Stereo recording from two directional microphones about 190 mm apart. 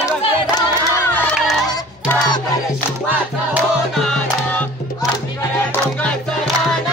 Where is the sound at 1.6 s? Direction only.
15° left (ahead or behind).